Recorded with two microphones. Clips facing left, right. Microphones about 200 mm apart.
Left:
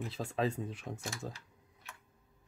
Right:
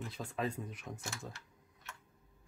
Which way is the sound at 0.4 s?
30° left (ahead or behind).